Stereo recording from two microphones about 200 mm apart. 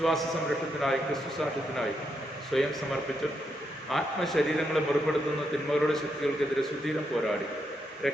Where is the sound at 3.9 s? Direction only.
Centre (ahead or behind).